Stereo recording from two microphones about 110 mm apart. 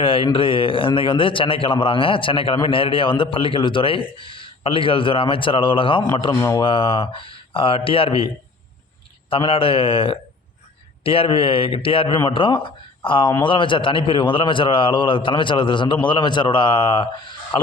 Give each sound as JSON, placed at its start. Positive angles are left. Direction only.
{"t": 0.0, "sound": "a man's voice", "side_deg": 55}
{"t": 9.3, "sound": "a man's voice", "side_deg": 55}